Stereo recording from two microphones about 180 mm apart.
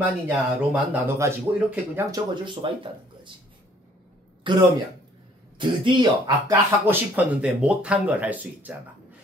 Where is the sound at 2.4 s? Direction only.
30° right (ahead or behind).